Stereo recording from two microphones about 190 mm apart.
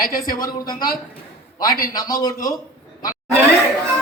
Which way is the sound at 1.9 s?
20° left (ahead or behind).